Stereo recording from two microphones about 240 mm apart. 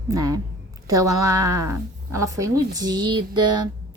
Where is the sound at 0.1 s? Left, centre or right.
Centre.